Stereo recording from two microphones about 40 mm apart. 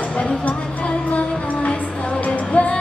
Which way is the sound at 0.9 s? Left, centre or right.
Left.